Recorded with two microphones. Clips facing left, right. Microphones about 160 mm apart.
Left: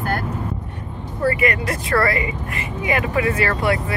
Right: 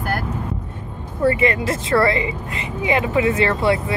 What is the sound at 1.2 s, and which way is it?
Speech, 25° right (ahead or behind).